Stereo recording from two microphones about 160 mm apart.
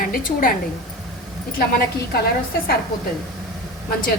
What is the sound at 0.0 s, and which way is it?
Speech, 60° left (ahead or behind).